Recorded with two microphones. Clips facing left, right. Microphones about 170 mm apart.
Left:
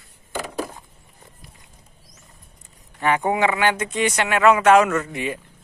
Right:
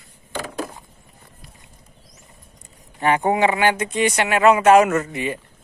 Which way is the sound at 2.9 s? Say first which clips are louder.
Right 2 dB; 30° right (ahead or behind).